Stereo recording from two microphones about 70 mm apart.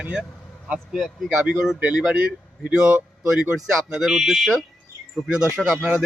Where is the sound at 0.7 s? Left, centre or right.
Centre.